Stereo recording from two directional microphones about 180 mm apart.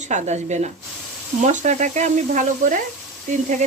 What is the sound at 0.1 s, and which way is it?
Speech, 40° right (ahead or behind).